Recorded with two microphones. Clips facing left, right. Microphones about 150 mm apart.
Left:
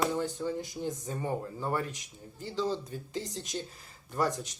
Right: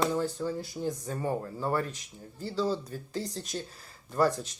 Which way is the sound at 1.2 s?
40° right (ahead or behind).